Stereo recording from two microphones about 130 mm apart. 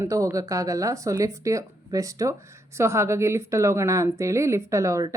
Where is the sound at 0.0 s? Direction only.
25° right (ahead or behind).